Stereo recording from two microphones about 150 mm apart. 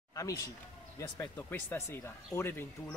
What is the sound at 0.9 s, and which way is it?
Speech, 15° left (ahead or behind).